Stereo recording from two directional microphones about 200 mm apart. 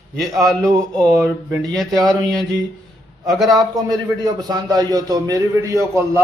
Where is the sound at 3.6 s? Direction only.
20° right (ahead or behind).